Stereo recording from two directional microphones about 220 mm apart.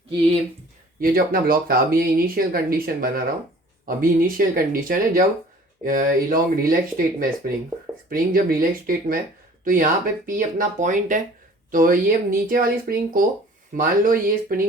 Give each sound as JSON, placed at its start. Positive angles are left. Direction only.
{"t": 0.9, "sound": "speech", "side_deg": -40}